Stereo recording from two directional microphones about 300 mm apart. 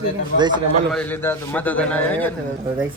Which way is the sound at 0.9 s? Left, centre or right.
Centre.